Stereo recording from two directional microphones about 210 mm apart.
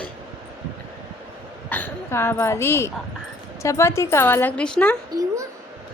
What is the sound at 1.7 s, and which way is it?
A woman's voice, 10° left (ahead or behind).